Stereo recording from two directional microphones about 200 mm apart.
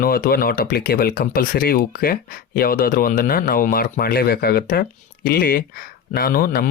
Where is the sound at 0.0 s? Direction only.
45° left (ahead or behind).